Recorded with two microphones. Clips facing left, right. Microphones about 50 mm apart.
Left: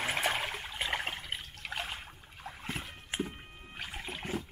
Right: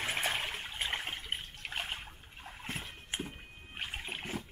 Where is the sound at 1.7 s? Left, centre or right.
Right.